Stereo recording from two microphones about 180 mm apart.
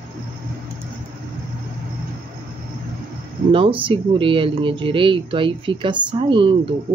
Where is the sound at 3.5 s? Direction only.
30° right (ahead or behind).